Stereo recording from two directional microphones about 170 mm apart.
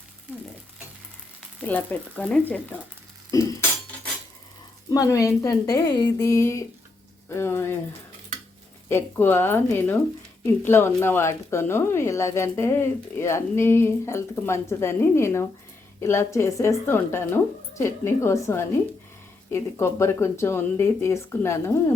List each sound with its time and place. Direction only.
1.6 s speech: 10° left (ahead or behind)
3.3 s speech: 20° left (ahead or behind)
4.9 s speech: 20° left (ahead or behind)
8.9 s speech: 15° left (ahead or behind)